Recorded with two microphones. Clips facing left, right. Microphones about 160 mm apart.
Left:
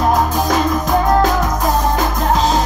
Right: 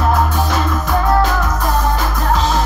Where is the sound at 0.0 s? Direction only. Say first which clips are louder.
Left 1 dB; 15° left (ahead or behind).